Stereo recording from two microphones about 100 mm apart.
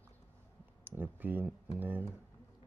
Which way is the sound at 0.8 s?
20° right (ahead or behind).